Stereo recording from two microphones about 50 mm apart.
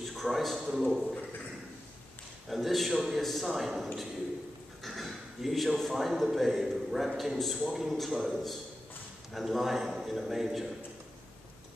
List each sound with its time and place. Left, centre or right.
0.0 s a man's voice: centre
2.5 s speech: centre